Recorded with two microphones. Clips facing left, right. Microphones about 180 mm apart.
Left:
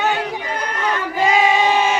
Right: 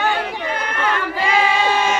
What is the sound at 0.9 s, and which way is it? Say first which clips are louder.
Crowd: left 3 dB; 20° left (ahead or behind).